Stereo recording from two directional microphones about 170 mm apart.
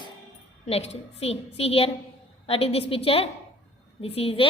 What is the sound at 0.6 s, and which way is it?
A woman's voice, 35° left (ahead or behind).